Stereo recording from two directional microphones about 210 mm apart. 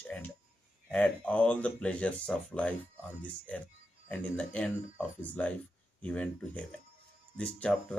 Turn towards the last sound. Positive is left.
turn(degrees=5)  # may be behind; listen again after turning